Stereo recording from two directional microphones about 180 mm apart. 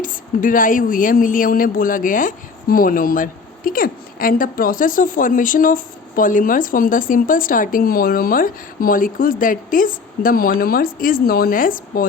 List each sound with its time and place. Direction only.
0.0 s a woman's voice: 50° left (ahead or behind)